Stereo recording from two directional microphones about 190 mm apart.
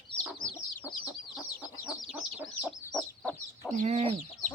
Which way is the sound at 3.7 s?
40° right (ahead or behind).